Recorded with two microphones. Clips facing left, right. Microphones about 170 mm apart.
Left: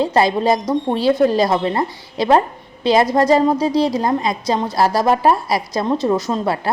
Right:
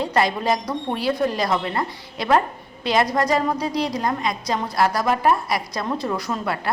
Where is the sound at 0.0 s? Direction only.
30° left (ahead or behind).